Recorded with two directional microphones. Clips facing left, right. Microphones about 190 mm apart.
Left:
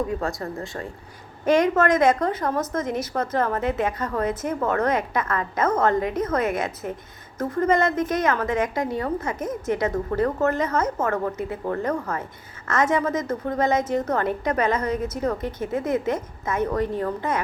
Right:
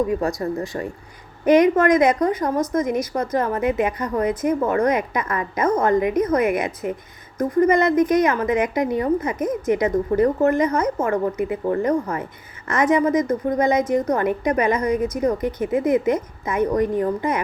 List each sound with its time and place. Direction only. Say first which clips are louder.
0.5 s a woman's voice: right 6 dB; 15° right (ahead or behind)